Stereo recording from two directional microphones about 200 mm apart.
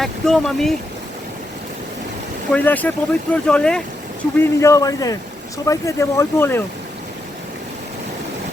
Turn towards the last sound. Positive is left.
turn(degrees=10)  # may be behind; listen again after turning